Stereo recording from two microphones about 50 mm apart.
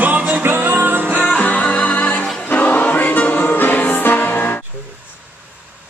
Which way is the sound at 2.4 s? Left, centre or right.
Left.